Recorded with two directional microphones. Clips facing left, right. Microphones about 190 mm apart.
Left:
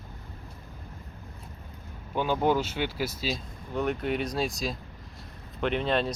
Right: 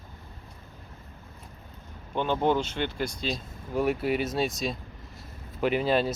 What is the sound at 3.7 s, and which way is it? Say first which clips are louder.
Speech: right 2 dB; 5° right (ahead or behind).